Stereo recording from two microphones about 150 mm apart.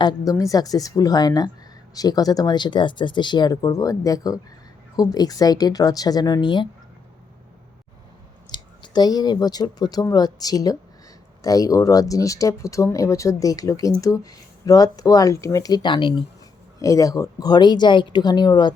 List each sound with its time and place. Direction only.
0.0 s speech: 25° left (ahead or behind)
8.4 s speech: 30° left (ahead or behind)
16.8 s speech: 20° left (ahead or behind)